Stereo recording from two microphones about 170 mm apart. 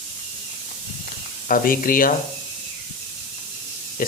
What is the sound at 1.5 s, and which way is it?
Speech, 55° left (ahead or behind).